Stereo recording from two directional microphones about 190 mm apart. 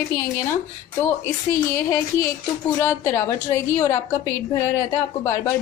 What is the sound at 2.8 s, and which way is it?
Speech, 10° left (ahead or behind).